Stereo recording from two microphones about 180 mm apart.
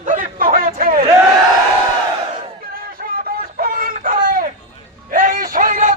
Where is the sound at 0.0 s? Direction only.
45° right (ahead or behind).